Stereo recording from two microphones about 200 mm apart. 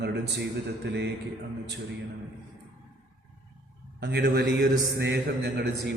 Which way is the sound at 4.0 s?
55° right (ahead or behind).